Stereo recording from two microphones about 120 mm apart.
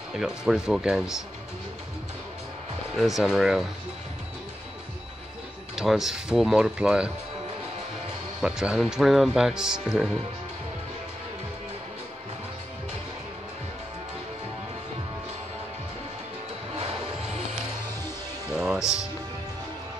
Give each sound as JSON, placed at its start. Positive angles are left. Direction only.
{"t": 0.1, "sound": "speech", "side_deg": -5}
{"t": 3.0, "sound": "speech", "side_deg": -5}
{"t": 5.8, "sound": "speech", "side_deg": -5}
{"t": 8.4, "sound": "speech", "side_deg": -5}
{"t": 16.7, "sound": "music", "side_deg": -70}
{"t": 18.5, "sound": "music", "side_deg": -5}